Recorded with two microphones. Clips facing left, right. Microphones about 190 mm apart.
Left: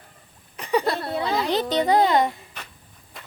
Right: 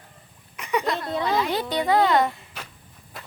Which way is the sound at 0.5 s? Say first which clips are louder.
Left 3 dB; 35° left (ahead or behind).